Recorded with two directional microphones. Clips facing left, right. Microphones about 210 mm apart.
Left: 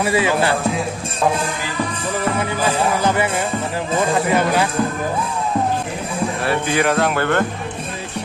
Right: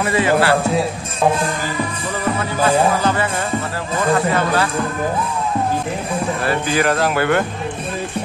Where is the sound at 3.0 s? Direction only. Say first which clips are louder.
Left 1 dB; 15° left (ahead or behind).